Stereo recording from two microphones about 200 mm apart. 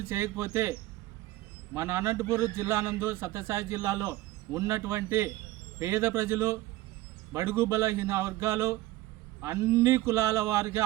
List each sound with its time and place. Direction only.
0.0 s a man's voice: 15° right (ahead or behind)